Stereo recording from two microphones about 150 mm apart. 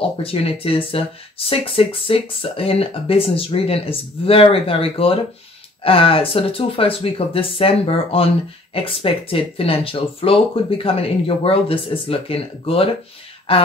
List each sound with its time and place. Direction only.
0.2 s speech: 40° left (ahead or behind)